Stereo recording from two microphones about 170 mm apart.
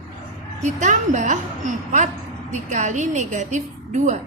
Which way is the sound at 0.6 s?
45° right (ahead or behind).